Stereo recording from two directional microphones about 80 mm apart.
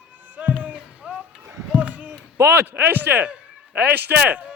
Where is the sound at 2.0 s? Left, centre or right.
Right.